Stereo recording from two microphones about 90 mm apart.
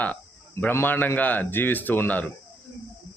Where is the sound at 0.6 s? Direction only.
25° left (ahead or behind).